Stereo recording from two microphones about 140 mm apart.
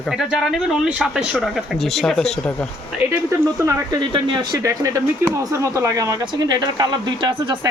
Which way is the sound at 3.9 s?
35° right (ahead or behind).